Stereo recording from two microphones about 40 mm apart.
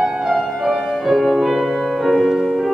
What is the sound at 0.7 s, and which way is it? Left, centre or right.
Music, centre.